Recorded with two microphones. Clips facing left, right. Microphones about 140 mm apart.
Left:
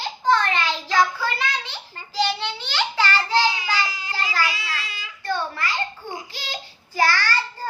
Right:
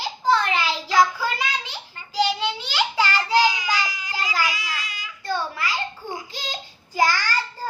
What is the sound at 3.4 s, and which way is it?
Child singing, 30° left (ahead or behind).